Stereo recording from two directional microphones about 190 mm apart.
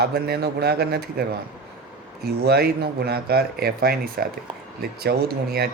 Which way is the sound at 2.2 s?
55° right (ahead or behind).